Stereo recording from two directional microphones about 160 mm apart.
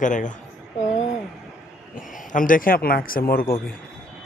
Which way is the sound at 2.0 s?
60° left (ahead or behind).